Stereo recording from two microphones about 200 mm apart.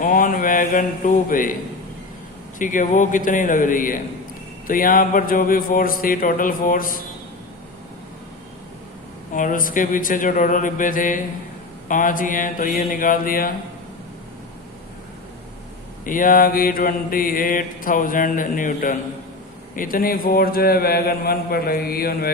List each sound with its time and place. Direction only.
0.0 s mantra: 40° left (ahead or behind)
2.6 s speech: 40° left (ahead or behind)
4.6 s mantra: 45° left (ahead or behind)
9.3 s speech: 40° left (ahead or behind)
11.9 s mantra: 40° left (ahead or behind)
16.0 s mantra: 45° left (ahead or behind)